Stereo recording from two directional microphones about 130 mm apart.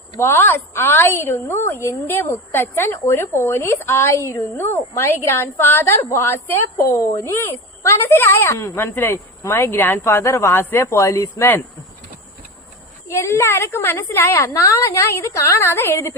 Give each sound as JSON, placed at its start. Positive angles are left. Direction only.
{"t": 0.2, "sound": "a woman's voice", "side_deg": 20}
{"t": 13.1, "sound": "a woman's voice", "side_deg": 20}